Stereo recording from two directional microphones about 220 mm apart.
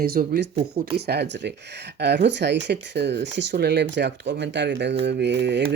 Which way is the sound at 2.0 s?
50° right (ahead or behind).